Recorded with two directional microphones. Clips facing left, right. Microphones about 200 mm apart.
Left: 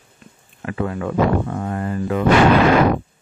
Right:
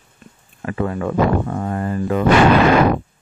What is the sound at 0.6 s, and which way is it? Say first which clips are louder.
Speech: right 2 dB; 40° right (ahead or behind).